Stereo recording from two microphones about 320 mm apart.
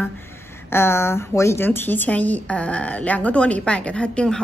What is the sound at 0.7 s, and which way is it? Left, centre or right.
A woman's voice, centre.